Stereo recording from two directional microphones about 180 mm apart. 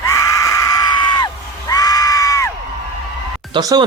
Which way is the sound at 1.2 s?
20° left (ahead or behind).